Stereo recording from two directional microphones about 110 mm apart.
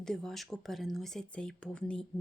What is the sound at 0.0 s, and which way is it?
A woman's voice, 5° left (ahead or behind).